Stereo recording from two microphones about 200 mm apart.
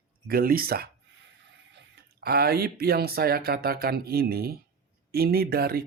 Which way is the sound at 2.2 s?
50° right (ahead or behind).